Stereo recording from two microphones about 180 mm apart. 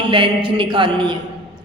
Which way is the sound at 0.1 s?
25° right (ahead or behind).